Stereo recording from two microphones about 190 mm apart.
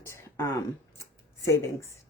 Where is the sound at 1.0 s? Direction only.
15° left (ahead or behind).